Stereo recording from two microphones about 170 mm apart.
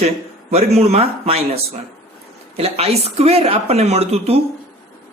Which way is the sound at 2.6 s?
35° right (ahead or behind).